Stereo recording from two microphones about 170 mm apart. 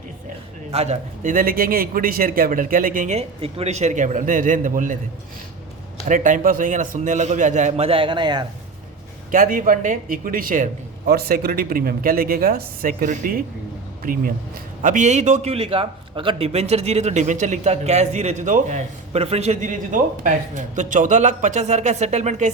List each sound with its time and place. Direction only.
0.7 s a man's voice: 40° right (ahead or behind)
6.1 s a man's voice: 50° right (ahead or behind); by 8.4 s 25° right (ahead or behind)
9.3 s a man's voice: 55° right (ahead or behind)